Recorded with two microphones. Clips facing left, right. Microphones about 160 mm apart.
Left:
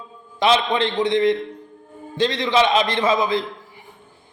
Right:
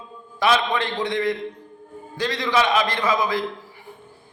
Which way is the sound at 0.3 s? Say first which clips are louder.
Left 2 dB; 20° left (ahead or behind).